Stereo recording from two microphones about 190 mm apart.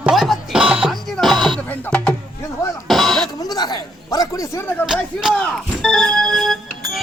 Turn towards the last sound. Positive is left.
turn(degrees=0)  # may be behind; listen again after turning